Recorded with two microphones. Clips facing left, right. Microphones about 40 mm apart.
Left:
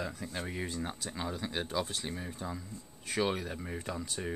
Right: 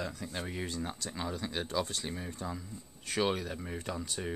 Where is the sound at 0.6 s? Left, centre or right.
Centre.